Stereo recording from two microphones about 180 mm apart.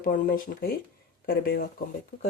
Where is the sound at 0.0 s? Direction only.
55° left (ahead or behind).